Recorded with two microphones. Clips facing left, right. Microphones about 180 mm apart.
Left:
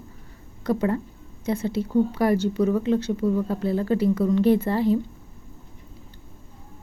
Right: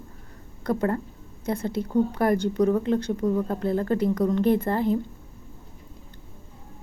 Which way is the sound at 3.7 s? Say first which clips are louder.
Even; 45° right (ahead or behind).